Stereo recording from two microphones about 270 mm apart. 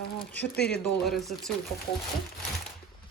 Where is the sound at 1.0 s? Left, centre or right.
Centre.